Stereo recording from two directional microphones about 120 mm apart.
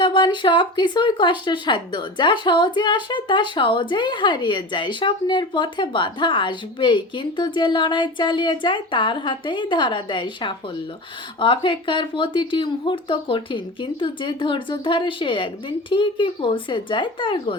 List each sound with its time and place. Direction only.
0.0 s speech: 40° left (ahead or behind)